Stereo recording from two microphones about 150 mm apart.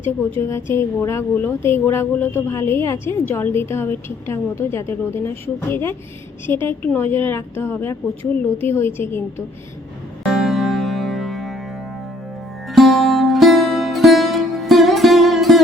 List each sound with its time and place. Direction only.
0.0 s a woman's voice: 15° left (ahead or behind)
10.2 s music: centre (ahead or behind)